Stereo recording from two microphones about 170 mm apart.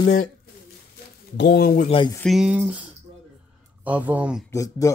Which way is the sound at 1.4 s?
65° left (ahead or behind).